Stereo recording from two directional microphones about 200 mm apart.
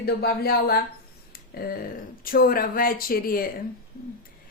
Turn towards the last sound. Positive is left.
turn(degrees=45)  # may be behind; listen again after turning